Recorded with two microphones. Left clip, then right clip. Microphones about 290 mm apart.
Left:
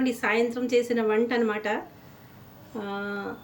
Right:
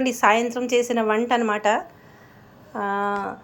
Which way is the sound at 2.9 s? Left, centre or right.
Centre.